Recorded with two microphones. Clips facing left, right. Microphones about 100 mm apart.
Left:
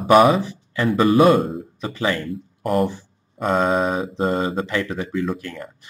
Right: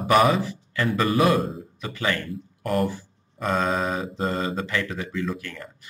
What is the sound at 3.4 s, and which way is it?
Speech, 30° left (ahead or behind).